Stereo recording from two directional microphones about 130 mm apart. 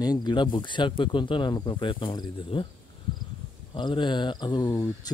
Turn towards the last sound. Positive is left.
turn(degrees=30)  # may be behind; listen again after turning